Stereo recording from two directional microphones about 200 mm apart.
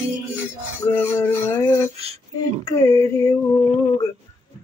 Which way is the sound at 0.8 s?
10° left (ahead or behind).